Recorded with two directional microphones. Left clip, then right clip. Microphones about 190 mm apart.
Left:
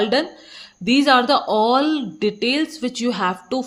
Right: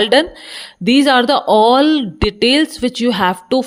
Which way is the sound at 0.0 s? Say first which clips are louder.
Right 7 dB; 45° right (ahead or behind).